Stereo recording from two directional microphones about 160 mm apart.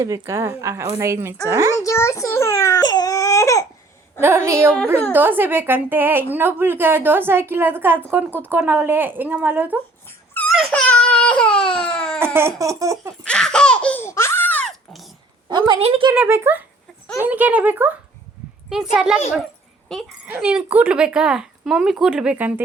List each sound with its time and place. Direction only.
0.0 s a woman's voice: 20° right (ahead or behind)
1.7 s baby cry: 20° left (ahead or behind)
4.2 s a woman's voice: 15° right (ahead or behind)
10.3 s a sound: centre (ahead or behind)
10.7 s baby cry: 5° left (ahead or behind)
12.2 s speech: 15° right (ahead or behind)
13.2 s laughter: 5° left (ahead or behind)
15.4 s speech: 30° right (ahead or behind)
16.1 s a woman's voice: 10° right (ahead or behind)